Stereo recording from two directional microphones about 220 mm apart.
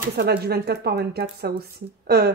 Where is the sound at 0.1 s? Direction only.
45° right (ahead or behind).